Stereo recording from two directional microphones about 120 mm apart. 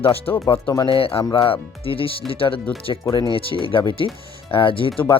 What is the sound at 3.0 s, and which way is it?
Speech, 30° left (ahead or behind).